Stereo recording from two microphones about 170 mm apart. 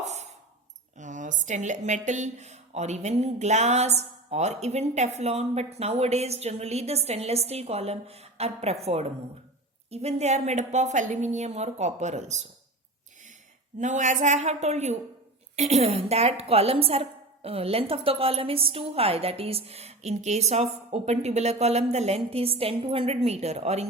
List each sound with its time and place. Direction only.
0.0 s a sound: 40° right (ahead or behind)
0.9 s a woman's voice: 45° right (ahead or behind)
13.7 s a woman's voice: 45° right (ahead or behind)